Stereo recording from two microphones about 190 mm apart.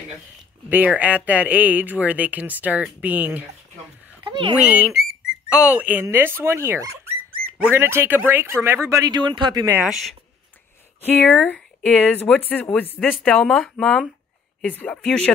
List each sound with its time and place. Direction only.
0.7 s speech: 10° right (ahead or behind)
4.2 s a sound: 25° right (ahead or behind)
4.6 s speech: 5° right (ahead or behind)
9.8 s speech: centre (ahead or behind)
11.0 s speech: 10° left (ahead or behind)